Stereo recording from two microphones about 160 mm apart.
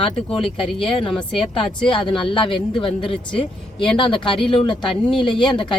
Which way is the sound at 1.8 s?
30° left (ahead or behind).